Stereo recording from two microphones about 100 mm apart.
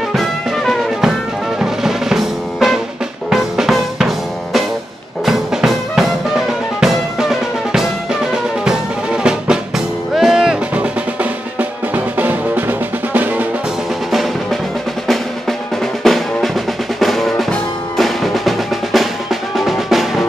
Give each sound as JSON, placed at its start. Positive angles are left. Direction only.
{"t": 0.1, "sound": "music", "side_deg": 0}
{"t": 3.3, "sound": "drum", "side_deg": -5}
{"t": 5.2, "sound": "music", "side_deg": -5}
{"t": 6.8, "sound": "drum", "side_deg": -5}
{"t": 10.1, "sound": "music", "side_deg": -5}
{"t": 11.9, "sound": "music", "side_deg": -20}
{"t": 16.0, "sound": "music", "side_deg": 0}